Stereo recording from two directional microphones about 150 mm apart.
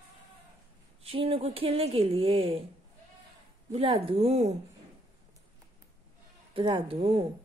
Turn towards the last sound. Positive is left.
turn(degrees=-40)  # may be behind; listen again after turning